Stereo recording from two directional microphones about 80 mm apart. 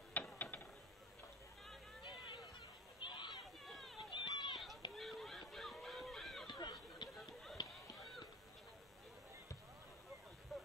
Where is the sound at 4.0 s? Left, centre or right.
Left.